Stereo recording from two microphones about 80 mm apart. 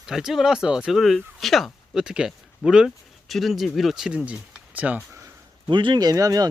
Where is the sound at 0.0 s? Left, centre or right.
Centre.